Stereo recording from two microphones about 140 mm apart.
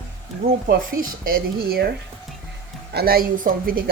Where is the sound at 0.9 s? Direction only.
90° right.